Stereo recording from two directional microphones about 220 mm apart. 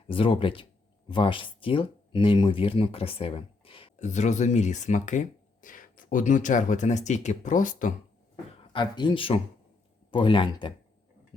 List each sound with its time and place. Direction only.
0.1 s speech: 25° left (ahead or behind)
8.7 s speech: 20° left (ahead or behind)